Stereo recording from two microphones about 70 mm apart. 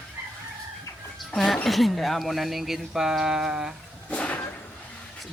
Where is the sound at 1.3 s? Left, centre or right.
Centre.